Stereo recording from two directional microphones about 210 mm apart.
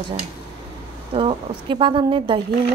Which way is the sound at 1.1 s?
25° right (ahead or behind).